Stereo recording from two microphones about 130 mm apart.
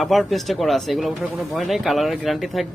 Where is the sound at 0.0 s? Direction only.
Centre (ahead or behind).